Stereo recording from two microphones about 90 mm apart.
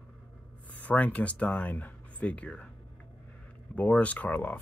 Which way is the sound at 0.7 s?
15° left (ahead or behind).